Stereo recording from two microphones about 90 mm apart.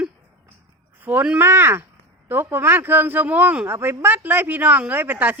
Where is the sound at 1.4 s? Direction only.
25° right (ahead or behind).